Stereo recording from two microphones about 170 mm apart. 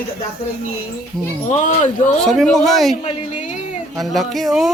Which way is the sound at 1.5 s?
45° left (ahead or behind).